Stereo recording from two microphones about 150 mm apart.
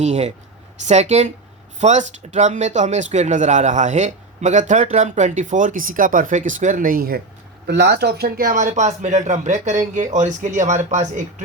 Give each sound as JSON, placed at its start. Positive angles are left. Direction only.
{"t": 0.0, "sound": "speech", "side_deg": -50}